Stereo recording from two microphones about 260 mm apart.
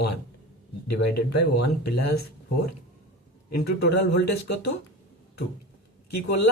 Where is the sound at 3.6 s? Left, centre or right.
Left.